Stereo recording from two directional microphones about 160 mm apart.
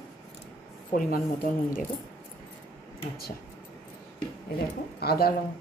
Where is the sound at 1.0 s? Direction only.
65° left (ahead or behind).